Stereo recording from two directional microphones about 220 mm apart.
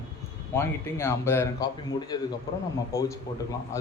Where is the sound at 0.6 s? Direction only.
10° left (ahead or behind).